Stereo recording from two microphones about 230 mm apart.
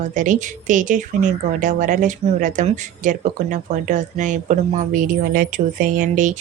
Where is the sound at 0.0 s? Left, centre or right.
Right.